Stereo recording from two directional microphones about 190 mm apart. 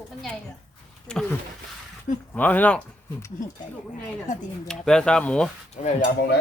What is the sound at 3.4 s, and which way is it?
Speech, 40° left (ahead or behind).